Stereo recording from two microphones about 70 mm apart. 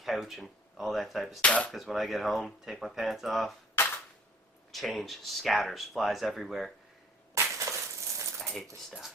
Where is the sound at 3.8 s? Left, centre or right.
Left.